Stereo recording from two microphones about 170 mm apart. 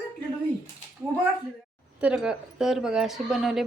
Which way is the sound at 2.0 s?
5° right (ahead or behind).